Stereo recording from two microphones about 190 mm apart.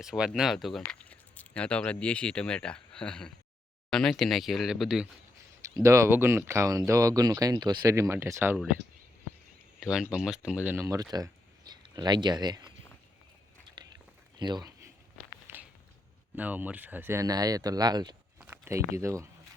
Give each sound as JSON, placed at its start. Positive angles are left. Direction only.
{"t": 0.0, "sound": "speech", "side_deg": 0}
{"t": 5.7, "sound": "speech", "side_deg": -15}
{"t": 9.8, "sound": "speech", "side_deg": -5}
{"t": 13.8, "sound": "whispering", "side_deg": -25}
{"t": 14.3, "sound": "speech", "side_deg": -25}
{"t": 16.3, "sound": "speech", "side_deg": -10}
{"t": 18.3, "sound": "a sound", "side_deg": -10}
{"t": 18.9, "sound": "speech", "side_deg": -15}